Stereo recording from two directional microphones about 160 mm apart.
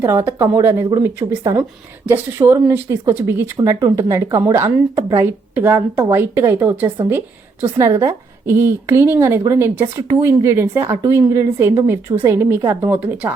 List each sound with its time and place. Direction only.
0.0 s a woman's voice: 15° right (ahead or behind)